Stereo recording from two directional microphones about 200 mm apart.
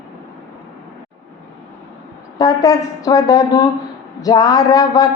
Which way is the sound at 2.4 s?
20° left (ahead or behind).